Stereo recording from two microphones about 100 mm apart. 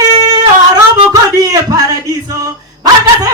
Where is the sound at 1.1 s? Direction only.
40° right (ahead or behind).